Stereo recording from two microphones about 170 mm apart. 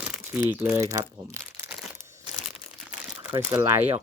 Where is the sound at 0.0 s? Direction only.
10° right (ahead or behind).